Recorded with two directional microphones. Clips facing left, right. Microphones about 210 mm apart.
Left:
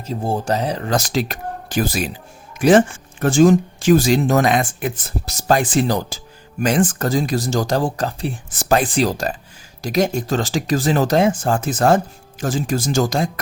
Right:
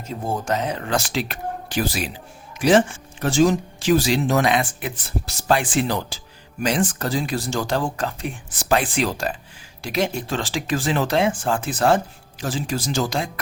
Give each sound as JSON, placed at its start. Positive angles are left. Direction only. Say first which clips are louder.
{"t": 0.0, "sound": "speech", "louder": "left 4 dB", "side_deg": 35}